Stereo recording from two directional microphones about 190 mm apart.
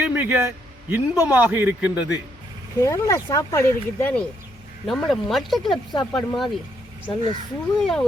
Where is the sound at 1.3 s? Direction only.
10° right (ahead or behind).